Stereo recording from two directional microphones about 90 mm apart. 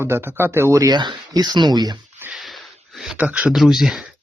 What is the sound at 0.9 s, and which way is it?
Speech, 50° right (ahead or behind).